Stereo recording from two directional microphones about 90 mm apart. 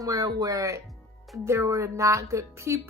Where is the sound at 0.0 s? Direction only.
40° right (ahead or behind).